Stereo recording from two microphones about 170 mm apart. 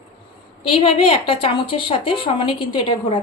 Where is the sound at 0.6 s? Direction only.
30° left (ahead or behind).